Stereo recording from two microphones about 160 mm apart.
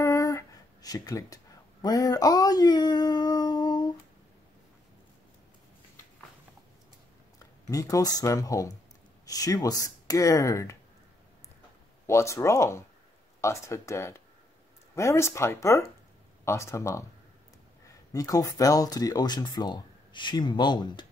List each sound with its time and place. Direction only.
0.0 s a sound: 20° left (ahead or behind)
7.3 s speech: 20° left (ahead or behind)
12.1 s speech: 20° left (ahead or behind)
18.1 s speech: 20° left (ahead or behind)